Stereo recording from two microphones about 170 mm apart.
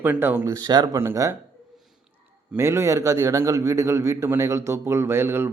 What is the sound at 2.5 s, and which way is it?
A man's voice, 15° right (ahead or behind).